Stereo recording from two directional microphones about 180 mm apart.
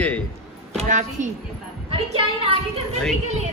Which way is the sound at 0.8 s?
45° right (ahead or behind).